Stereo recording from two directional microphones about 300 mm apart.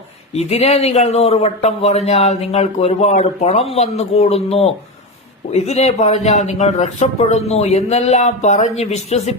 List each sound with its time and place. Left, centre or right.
0.3 s a man's voice: left